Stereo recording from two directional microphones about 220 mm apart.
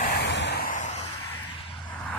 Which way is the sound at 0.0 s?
45° left (ahead or behind).